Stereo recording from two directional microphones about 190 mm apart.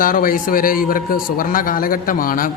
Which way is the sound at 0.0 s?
50° left (ahead or behind).